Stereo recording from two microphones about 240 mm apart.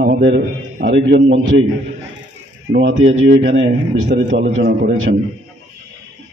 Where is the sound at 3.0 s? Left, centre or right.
Right.